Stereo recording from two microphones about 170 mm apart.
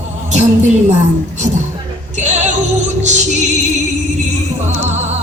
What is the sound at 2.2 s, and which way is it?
Music, 45° right (ahead or behind).